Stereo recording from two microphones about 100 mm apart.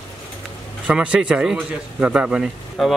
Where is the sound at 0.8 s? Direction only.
10° right (ahead or behind).